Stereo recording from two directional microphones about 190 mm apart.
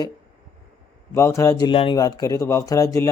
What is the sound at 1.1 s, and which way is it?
Speech, 15° left (ahead or behind).